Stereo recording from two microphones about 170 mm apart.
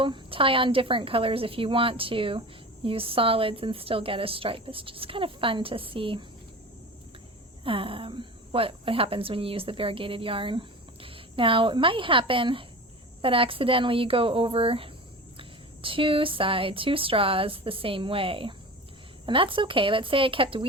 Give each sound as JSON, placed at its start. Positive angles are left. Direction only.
{"t": 0.0, "sound": "a woman's voice", "side_deg": -30}
{"t": 7.6, "sound": "a woman's voice", "side_deg": -30}